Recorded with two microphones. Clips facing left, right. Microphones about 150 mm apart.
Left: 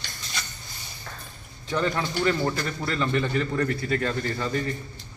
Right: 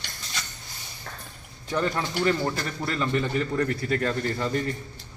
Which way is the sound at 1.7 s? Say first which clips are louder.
Left 1 dB; 5° right (ahead or behind).